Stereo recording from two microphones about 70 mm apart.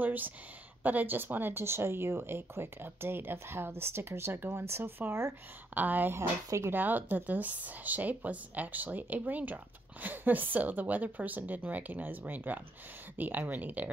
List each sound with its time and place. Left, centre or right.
0.0 s speech: right
6.1 s speech: right
6.7 s speech: right